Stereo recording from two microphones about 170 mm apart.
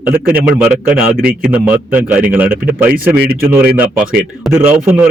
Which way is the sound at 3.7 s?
10° right (ahead or behind).